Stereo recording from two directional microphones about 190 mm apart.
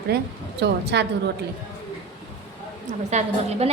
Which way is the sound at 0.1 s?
55° right (ahead or behind).